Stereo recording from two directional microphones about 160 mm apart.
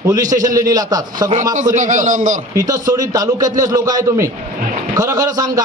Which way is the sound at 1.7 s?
50° right (ahead or behind).